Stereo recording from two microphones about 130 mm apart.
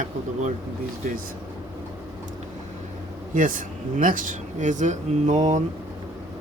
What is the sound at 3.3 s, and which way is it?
Speech, 90° right.